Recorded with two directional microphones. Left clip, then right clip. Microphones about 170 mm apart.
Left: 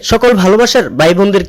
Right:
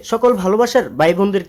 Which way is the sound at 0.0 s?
30° left (ahead or behind).